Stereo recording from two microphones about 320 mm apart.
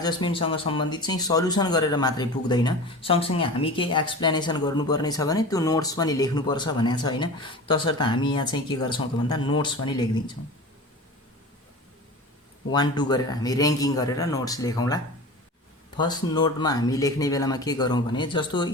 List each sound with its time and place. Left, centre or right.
0.0 s speech: centre
12.6 s speech: centre